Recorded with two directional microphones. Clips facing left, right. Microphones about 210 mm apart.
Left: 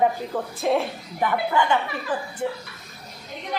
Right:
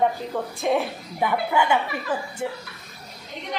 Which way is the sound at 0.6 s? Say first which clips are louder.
Left 1 dB; centre (ahead or behind).